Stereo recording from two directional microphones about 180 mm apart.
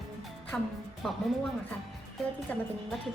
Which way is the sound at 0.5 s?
10° left (ahead or behind).